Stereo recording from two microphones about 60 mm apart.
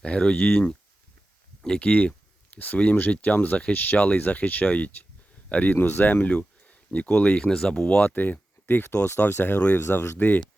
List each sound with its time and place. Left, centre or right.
0.0 s speech: centre
9.8 s speech: left